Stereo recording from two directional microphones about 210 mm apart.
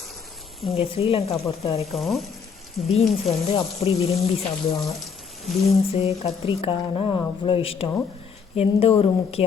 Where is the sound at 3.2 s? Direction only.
30° left (ahead or behind).